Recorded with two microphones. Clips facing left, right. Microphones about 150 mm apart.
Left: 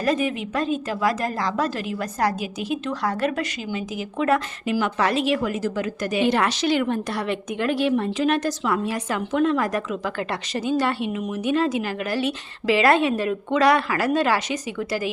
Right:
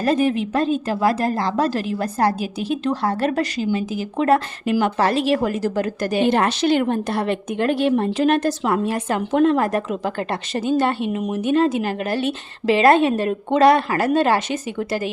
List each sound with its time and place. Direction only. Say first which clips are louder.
0.0 s a woman's voice: right 4 dB; 35° right (ahead or behind)
6.2 s a woman's voice: right 3 dB; 55° right (ahead or behind)
12.6 s a woman's voice: right 4 dB; 25° right (ahead or behind)
12.9 s a woman's voice: right 3 dB; 50° right (ahead or behind)
14.2 s a woman's voice: right 4 dB; 25° right (ahead or behind)
14.5 s a woman's voice: right 3 dB; 50° right (ahead or behind)